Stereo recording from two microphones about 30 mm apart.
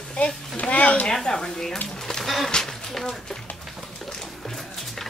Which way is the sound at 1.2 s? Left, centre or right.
Left.